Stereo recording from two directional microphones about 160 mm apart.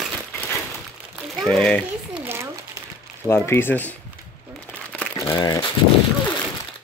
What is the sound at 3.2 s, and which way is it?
Speech, 15° left (ahead or behind).